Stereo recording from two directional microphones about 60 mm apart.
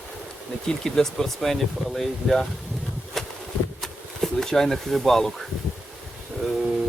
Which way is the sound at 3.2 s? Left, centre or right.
Centre.